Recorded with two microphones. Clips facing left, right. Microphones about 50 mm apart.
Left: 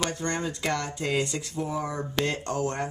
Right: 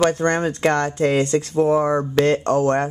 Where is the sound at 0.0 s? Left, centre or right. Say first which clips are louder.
Right 11 dB; right.